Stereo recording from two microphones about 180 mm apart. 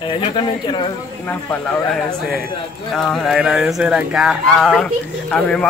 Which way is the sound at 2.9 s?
Centre (ahead or behind).